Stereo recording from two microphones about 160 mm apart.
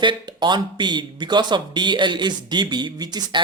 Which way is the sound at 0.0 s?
30° right (ahead or behind).